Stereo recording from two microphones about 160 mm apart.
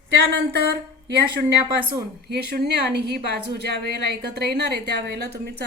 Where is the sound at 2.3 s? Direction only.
85° right.